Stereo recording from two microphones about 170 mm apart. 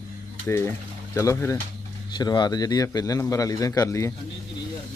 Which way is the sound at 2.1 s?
25° left (ahead or behind).